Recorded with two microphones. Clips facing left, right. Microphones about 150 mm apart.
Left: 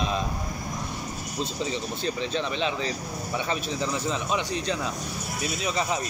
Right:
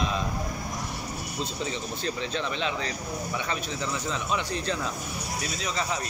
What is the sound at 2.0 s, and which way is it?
Speech, 20° left (ahead or behind).